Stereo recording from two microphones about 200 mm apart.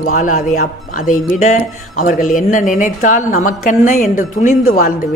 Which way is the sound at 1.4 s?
35° left (ahead or behind).